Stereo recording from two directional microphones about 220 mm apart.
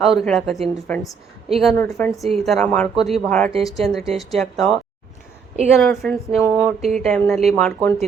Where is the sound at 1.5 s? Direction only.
5° left (ahead or behind).